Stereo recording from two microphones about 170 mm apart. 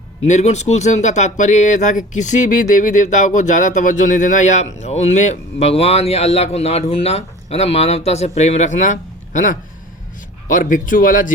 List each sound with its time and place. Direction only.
0.3 s speech: 40° left (ahead or behind)